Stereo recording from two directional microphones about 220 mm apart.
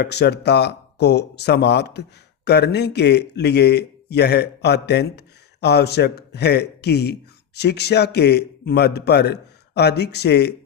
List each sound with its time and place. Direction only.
0.0 s speech: 50° left (ahead or behind)